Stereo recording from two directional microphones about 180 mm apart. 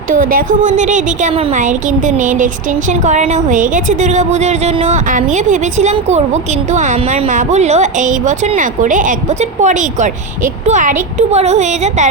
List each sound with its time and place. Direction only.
0.1 s a woman's voice: 50° right (ahead or behind)